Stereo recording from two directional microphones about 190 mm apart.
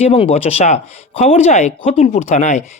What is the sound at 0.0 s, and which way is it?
Speech, 30° left (ahead or behind).